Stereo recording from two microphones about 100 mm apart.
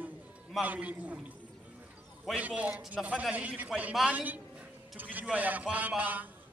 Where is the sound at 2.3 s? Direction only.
15° right (ahead or behind).